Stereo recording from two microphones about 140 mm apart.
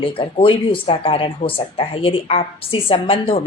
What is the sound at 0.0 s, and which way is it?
Speech, 40° left (ahead or behind).